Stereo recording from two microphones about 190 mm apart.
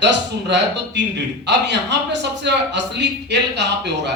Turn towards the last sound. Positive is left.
turn(degrees=-65)  # may be behind; listen again after turning